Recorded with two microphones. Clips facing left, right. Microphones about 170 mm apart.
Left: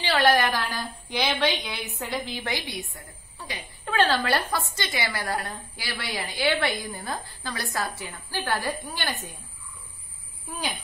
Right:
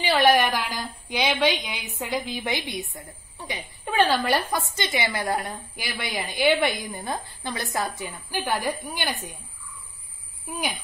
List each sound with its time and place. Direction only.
0.0 s a woman's voice: 15° right (ahead or behind)
10.5 s a woman's voice: 15° right (ahead or behind)